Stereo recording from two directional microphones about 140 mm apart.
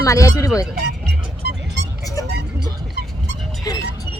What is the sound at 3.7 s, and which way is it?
Music, 30° left (ahead or behind).